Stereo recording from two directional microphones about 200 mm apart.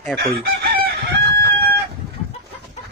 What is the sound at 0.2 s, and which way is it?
Chicken, 55° right (ahead or behind).